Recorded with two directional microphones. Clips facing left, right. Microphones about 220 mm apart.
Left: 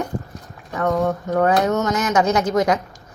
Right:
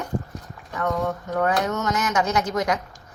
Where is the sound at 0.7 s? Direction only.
45° left (ahead or behind).